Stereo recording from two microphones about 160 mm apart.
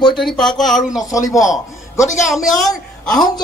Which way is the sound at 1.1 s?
20° left (ahead or behind).